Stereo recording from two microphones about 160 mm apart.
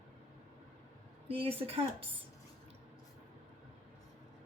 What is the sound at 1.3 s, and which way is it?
Speech, 35° right (ahead or behind).